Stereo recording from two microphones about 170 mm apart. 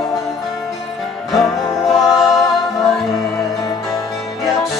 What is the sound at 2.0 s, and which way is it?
A capella, centre (ahead or behind).